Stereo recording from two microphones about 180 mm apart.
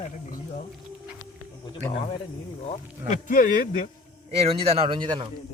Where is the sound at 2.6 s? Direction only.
45° left (ahead or behind).